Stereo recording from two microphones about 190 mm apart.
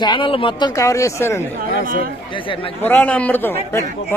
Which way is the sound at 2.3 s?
25° left (ahead or behind).